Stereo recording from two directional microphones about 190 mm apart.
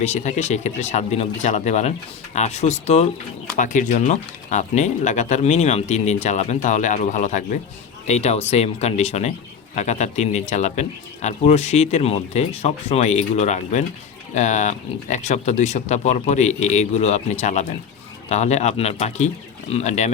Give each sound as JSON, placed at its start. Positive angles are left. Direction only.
{"t": 0.0, "sound": "speech", "side_deg": 40}